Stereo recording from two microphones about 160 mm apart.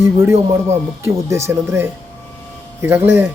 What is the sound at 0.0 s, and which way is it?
Speech, 15° right (ahead or behind).